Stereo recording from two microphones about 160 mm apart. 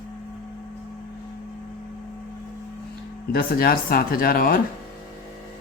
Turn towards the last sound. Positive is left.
turn(degrees=65)  # may be behind; listen again after turning